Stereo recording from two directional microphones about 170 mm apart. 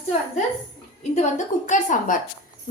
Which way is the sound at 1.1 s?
45° left (ahead or behind).